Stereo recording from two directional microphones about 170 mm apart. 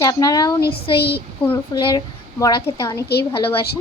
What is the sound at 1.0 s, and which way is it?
Speech, 70° left (ahead or behind).